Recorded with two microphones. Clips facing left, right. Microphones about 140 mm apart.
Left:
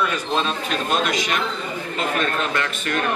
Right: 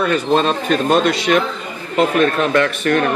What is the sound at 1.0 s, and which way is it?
Speech, 70° right (ahead or behind).